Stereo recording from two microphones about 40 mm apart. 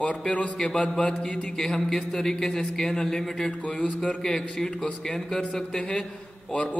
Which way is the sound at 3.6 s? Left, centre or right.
Left.